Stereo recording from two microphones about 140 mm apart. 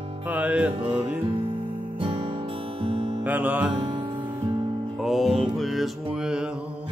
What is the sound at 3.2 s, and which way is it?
Music, 10° right (ahead or behind).